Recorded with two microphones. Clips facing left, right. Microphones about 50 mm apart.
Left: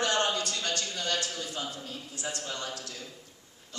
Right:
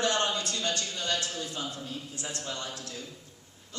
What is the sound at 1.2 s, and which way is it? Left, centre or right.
Speech, right.